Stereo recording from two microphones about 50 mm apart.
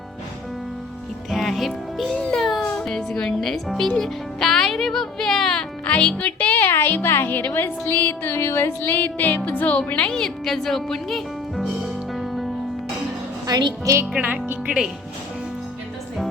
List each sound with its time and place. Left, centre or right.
1.3 s speech: centre
2.1 s a child's voice: centre
2.4 s music: centre
2.7 s speech: centre
5.8 s speech: left
6.1 s music: left
6.7 s a woman's voice: left
8.9 s music: left
9.6 s speech: left
10.1 s music: centre
13.8 s speech: right
14.2 s speech: right